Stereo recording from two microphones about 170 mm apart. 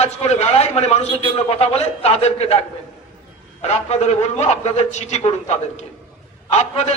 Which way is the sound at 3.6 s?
40° left (ahead or behind).